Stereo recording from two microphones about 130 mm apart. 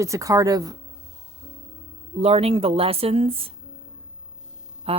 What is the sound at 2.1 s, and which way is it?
Speech, 50° right (ahead or behind).